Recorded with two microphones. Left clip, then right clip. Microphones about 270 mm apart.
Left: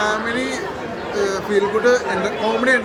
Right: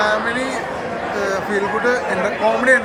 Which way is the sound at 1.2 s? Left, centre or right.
Centre.